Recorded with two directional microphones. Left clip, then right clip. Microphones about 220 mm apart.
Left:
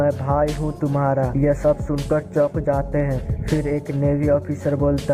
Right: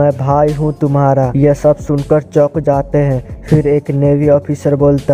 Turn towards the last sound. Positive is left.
turn(degrees=-45)  # may be behind; listen again after turning